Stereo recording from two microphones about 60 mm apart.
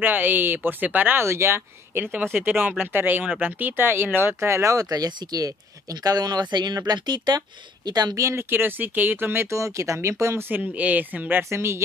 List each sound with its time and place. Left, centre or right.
0.0 s speech: right
1.2 s speech: right
2.3 s speech: right
4.7 s speech: right
7.9 s speech: right
8.3 s speech: right
9.5 s speech: right
10.5 s speech: right
11.5 s speech: right